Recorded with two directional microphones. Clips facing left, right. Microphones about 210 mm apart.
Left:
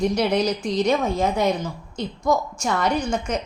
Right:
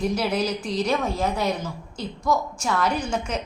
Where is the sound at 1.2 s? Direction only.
20° left (ahead or behind).